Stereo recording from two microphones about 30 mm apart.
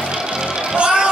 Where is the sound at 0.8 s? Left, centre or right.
Right.